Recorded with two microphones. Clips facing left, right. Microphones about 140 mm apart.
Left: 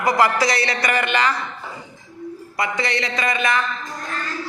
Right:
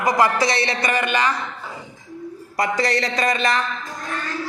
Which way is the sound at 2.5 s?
40° right (ahead or behind).